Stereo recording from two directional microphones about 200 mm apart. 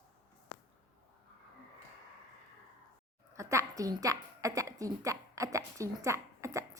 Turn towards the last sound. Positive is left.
turn(degrees=-15)  # may be behind; listen again after turning